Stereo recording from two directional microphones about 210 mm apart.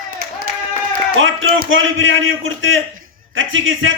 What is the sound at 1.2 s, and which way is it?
A man's voice, 70° right (ahead or behind).